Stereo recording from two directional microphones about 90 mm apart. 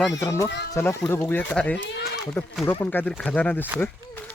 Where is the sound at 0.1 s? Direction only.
35° left (ahead or behind).